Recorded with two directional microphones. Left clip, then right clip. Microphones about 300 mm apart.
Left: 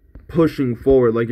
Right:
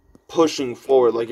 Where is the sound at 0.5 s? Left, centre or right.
Centre.